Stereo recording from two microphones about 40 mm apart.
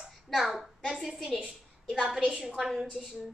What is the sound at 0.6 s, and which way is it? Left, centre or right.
A woman's voice, centre.